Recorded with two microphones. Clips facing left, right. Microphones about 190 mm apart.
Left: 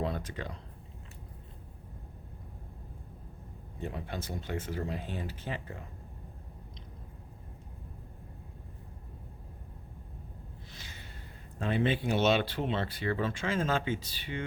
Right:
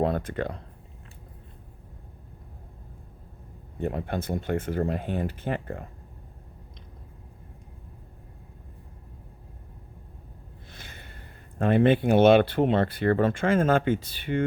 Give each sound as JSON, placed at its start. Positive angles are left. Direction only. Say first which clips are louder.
{"t": 0.0, "sound": "speech", "louder": "right 9 dB", "side_deg": -55}
{"t": 3.8, "sound": "speech", "louder": "right 9 dB", "side_deg": -55}
{"t": 10.7, "sound": "a sound", "louder": "right 3 dB", "side_deg": -55}
{"t": 11.6, "sound": "speech", "louder": "right 9 dB", "side_deg": -55}